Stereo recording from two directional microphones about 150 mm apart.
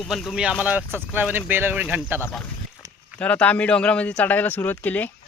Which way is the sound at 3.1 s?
10° left (ahead or behind).